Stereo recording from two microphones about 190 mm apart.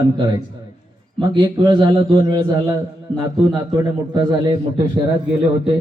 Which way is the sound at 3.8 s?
15° right (ahead or behind).